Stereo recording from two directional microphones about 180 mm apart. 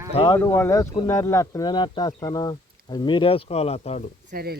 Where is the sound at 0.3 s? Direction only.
15° left (ahead or behind); by 4.1 s 35° left (ahead or behind).